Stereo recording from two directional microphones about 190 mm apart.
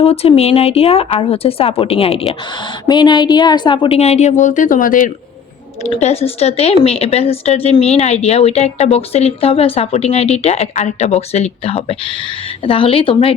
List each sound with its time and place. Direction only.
0.0 s a woman's voice: 30° left (ahead or behind)